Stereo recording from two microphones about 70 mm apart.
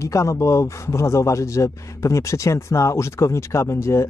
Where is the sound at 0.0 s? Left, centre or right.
Left.